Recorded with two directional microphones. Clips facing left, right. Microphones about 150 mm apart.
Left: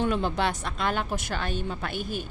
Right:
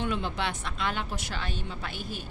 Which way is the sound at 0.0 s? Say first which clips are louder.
Left 5 dB; 40° left (ahead or behind).